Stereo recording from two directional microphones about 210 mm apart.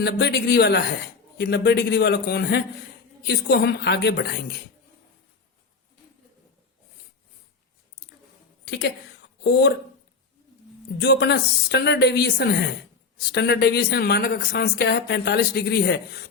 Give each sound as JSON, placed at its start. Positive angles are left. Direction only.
{"t": 0.0, "sound": "speech", "side_deg": 55}
{"t": 8.6, "sound": "a woman's voice", "side_deg": 55}
{"t": 10.9, "sound": "speech", "side_deg": 50}